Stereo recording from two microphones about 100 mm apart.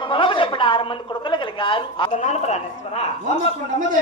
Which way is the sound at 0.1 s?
55° left (ahead or behind).